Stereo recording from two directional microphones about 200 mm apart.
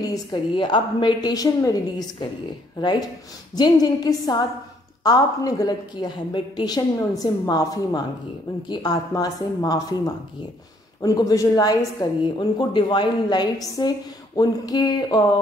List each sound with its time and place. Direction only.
0.0 s a woman's voice: 20° left (ahead or behind)